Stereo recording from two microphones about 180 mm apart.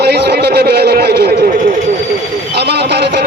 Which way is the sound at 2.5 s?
65° right (ahead or behind).